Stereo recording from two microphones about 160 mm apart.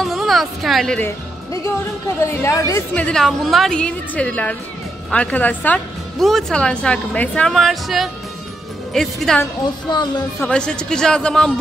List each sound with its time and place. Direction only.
0.0 s a woman's voice: centre (ahead or behind)
1.0 s a woman's voice: 20° left (ahead or behind)
2.9 s a man's voice: 5° left (ahead or behind)
9.8 s a woman's voice: 25° left (ahead or behind)
10.4 s a man's voice: 5° left (ahead or behind)